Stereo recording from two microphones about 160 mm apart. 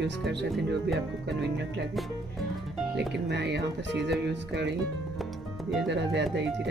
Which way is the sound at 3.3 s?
90° right.